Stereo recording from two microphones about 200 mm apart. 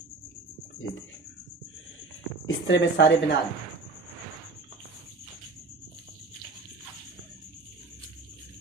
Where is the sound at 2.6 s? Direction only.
60° left (ahead or behind).